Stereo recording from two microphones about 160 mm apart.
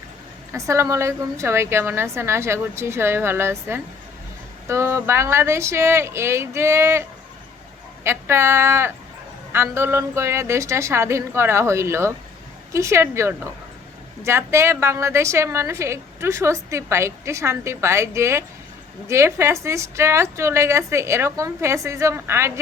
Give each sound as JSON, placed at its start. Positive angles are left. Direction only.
{"t": 0.5, "sound": "a woman's voice", "side_deg": -20}
{"t": 8.0, "sound": "a woman's voice", "side_deg": -15}